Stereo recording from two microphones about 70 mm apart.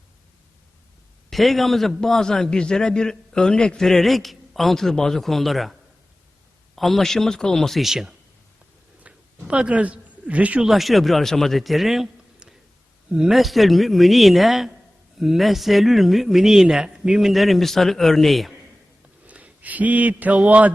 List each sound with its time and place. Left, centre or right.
1.3 s a man's voice: centre
6.7 s a man's voice: centre
9.0 s a sound: centre
10.6 s a man's voice: centre
19.3 s speech: centre